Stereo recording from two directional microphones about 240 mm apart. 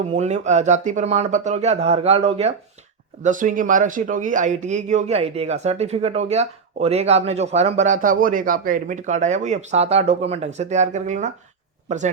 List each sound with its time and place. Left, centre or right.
0.1 s speech: right